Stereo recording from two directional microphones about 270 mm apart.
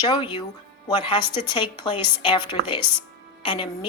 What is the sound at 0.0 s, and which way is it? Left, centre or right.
A woman's voice, centre.